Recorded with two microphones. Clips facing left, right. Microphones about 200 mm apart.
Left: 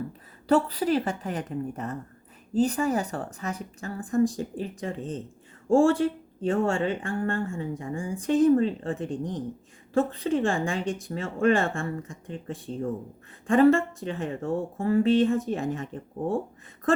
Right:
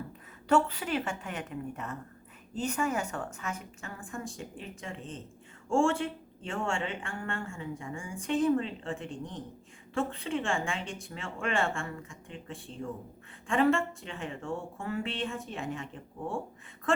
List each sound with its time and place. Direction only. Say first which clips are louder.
0.4 s speech: left 5 dB; 35° left (ahead or behind)